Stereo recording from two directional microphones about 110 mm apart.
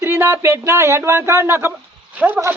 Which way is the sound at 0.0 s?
20° right (ahead or behind).